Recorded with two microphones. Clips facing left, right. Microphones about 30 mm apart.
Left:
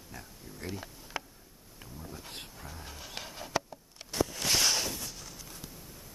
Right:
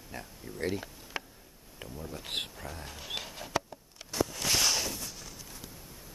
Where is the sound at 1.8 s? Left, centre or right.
Right.